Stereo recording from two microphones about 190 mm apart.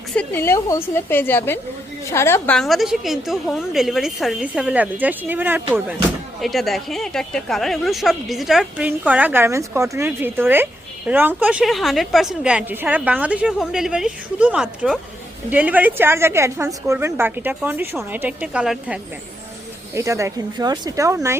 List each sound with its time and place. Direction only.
0.2 s a woman's voice: 10° left (ahead or behind); by 18.9 s 5° right (ahead or behind)
19.9 s a woman's voice: 15° right (ahead or behind)